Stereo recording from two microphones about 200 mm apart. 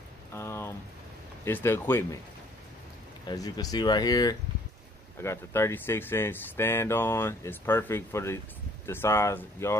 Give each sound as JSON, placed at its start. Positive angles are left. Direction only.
{"t": 0.3, "sound": "rain", "side_deg": 15}
{"t": 1.4, "sound": "speech", "side_deg": 10}
{"t": 3.3, "sound": "speech", "side_deg": 20}